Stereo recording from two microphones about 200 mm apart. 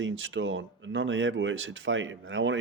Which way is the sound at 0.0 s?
70° right (ahead or behind).